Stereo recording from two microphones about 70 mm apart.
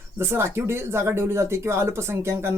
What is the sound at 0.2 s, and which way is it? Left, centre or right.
Speech, right.